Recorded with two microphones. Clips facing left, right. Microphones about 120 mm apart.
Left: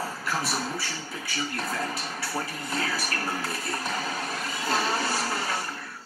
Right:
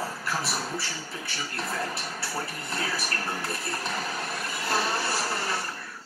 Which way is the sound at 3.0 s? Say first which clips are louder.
Left 1 dB; 5° left (ahead or behind).